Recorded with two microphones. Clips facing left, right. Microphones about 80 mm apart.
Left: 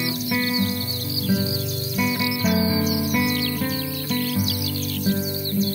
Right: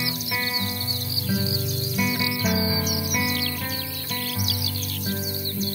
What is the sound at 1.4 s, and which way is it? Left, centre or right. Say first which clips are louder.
Music: left 2 dB; left.